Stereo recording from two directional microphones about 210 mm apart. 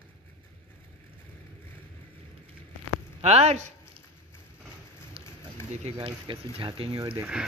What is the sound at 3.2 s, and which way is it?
Speech, 30° right (ahead or behind).